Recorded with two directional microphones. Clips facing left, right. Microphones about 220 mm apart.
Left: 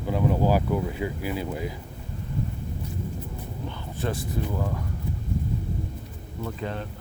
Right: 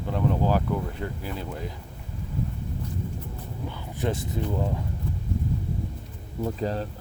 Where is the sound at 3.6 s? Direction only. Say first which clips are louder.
Right 2 dB; 20° right (ahead or behind).